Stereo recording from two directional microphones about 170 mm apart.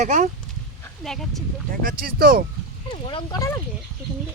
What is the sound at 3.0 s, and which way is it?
Speech, 25° left (ahead or behind).